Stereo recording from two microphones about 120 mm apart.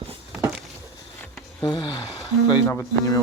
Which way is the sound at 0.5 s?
Centre (ahead or behind).